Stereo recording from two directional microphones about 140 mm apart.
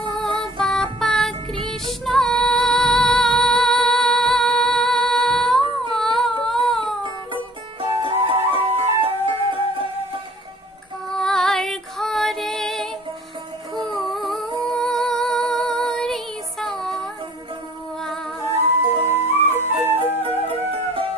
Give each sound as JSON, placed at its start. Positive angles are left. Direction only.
{"t": 0.2, "sound": "music", "side_deg": 5}
{"t": 5.9, "sound": "humming", "side_deg": 0}
{"t": 6.4, "sound": "a sound", "side_deg": 0}
{"t": 8.0, "sound": "music", "side_deg": -40}
{"t": 11.1, "sound": "female singing", "side_deg": 5}
{"t": 14.1, "sound": "humming", "side_deg": 0}
{"t": 14.7, "sound": "music", "side_deg": 5}
{"t": 19.0, "sound": "flute", "side_deg": -15}
{"t": 20.2, "sound": "music", "side_deg": -45}